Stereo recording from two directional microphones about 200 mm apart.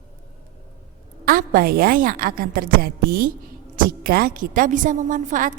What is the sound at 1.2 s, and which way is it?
A woman's voice, 45° right (ahead or behind).